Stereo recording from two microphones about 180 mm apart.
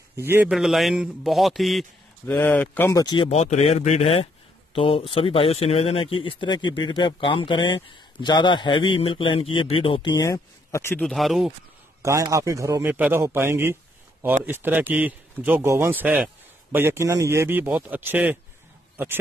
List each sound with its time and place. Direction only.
0.2 s a man's voice: 10° right (ahead or behind)
0.5 s a man's voice: centre (ahead or behind); by 3.3 s 20° left (ahead or behind)
3.3 s speech: 35° left (ahead or behind); by 11.0 s 15° left (ahead or behind)
11.0 s a man's voice: centre (ahead or behind)
12.0 s a man's voice: 15° right (ahead or behind)